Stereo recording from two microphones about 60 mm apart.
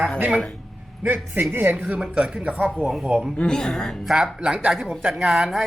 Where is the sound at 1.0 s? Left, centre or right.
Right.